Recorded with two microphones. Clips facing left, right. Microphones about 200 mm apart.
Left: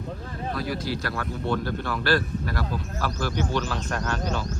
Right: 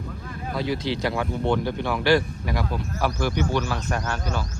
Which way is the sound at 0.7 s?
15° right (ahead or behind).